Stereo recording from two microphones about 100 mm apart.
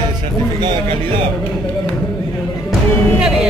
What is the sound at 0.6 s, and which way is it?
Speech, 50° right (ahead or behind).